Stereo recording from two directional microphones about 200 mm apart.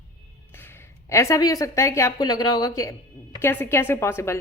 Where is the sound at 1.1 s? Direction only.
15° left (ahead or behind).